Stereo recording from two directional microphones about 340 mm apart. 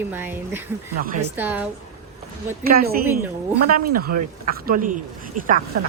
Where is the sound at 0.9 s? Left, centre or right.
Right.